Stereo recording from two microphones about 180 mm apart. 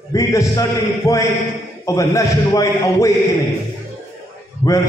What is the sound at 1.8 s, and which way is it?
A man's voice, 15° left (ahead or behind).